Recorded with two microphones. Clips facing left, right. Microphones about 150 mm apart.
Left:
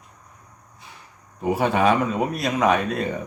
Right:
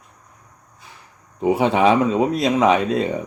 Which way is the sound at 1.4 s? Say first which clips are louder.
Right 4 dB; 20° right (ahead or behind).